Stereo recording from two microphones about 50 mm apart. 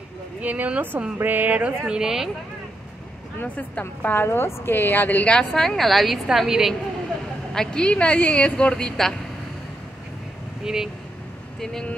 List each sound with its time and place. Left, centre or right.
0.4 s speech: right
1.8 s speech: centre
3.4 s a woman's voice: left
4.0 s a woman's voice: left
5.2 s a woman's voice: left; by 6.7 s centre
7.5 s a woman's voice: centre
7.8 s a woman's voice: left
10.6 s speech: centre
11.6 s a woman's voice: centre